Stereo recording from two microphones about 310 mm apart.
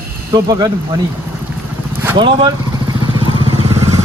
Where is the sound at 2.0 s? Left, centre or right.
Centre.